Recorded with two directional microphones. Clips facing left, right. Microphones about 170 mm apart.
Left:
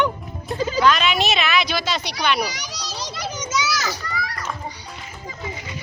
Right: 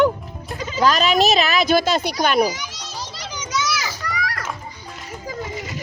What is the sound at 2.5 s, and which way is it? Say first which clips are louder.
Children playing: left 1 dB; 80° left.